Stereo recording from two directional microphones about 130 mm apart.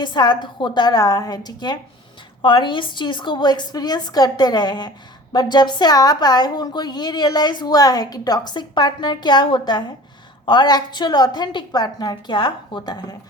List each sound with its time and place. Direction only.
0.0 s a woman's voice: 35° left (ahead or behind)